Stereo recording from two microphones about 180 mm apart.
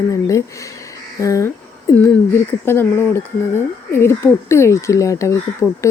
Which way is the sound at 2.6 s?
10° left (ahead or behind).